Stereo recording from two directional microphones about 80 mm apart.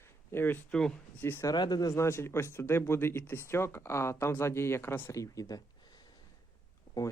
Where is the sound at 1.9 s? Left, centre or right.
Left.